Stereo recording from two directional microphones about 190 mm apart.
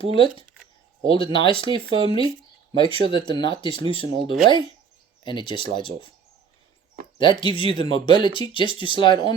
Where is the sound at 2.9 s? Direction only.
25° left (ahead or behind).